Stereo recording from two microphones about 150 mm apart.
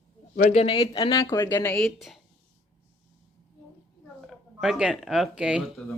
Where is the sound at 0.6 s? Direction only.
35° left (ahead or behind).